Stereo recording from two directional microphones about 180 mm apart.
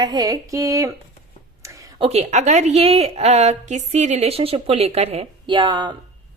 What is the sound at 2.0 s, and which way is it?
A woman's voice, 35° right (ahead or behind).